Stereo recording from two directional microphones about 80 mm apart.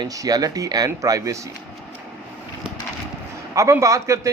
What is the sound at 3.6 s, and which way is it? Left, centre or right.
Speech, right.